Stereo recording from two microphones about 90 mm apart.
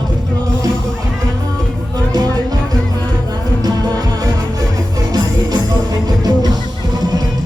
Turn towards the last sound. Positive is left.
turn(degrees=-45)  # may be behind; listen again after turning